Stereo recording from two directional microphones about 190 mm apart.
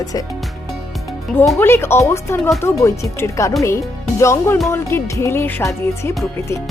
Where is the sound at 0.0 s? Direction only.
20° left (ahead or behind).